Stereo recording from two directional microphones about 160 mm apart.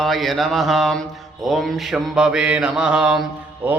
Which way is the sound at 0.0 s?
Centre (ahead or behind).